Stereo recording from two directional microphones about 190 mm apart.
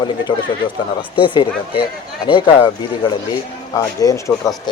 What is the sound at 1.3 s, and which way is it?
Speech, 25° left (ahead or behind).